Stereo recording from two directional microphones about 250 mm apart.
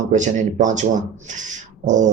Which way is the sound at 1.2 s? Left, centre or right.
Right.